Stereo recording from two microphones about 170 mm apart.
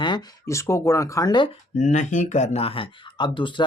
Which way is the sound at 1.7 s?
45° left (ahead or behind).